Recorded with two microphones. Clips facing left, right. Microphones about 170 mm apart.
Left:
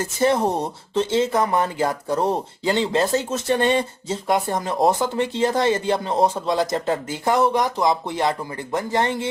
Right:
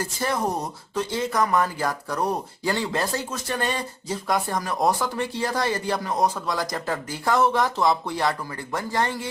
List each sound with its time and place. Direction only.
0.0 s speech: 25° left (ahead or behind)